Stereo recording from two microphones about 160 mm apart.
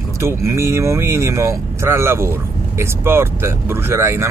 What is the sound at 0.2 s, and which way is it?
Speech, 15° right (ahead or behind).